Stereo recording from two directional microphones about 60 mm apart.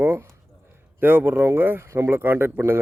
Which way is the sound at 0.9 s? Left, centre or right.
Right.